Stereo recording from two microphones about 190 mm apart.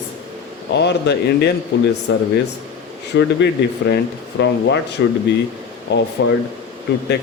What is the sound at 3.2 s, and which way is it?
Speech, 60° left (ahead or behind).